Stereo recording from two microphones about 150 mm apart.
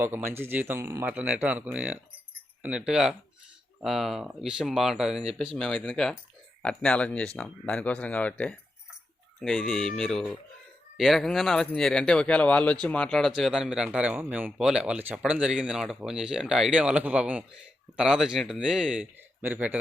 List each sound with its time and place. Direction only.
0.0 s speech: 15° right (ahead or behind)